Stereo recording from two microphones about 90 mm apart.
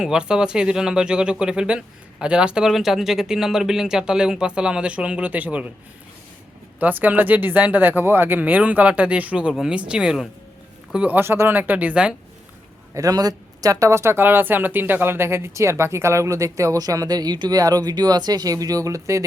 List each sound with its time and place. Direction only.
0.0 s speech: 10° right (ahead or behind)
6.7 s speech: 20° right (ahead or behind)
11.2 s speech: 25° right (ahead or behind)
12.9 s speech: 40° right (ahead or behind)